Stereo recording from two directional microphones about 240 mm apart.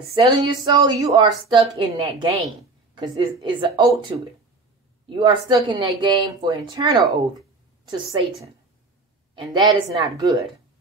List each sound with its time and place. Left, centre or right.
0.1 s a woman's voice: centre
5.1 s a woman's voice: centre
9.3 s speech: centre